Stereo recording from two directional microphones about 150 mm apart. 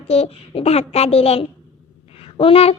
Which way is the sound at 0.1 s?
45° left (ahead or behind).